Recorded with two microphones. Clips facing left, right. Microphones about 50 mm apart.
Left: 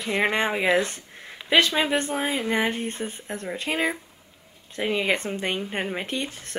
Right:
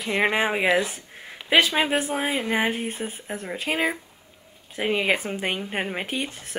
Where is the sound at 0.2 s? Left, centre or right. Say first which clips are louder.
Right 2 dB; centre.